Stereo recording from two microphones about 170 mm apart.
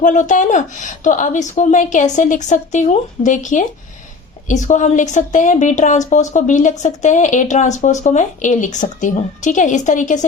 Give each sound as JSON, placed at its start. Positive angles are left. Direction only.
{"t": 0.0, "sound": "a woman's voice", "side_deg": 50}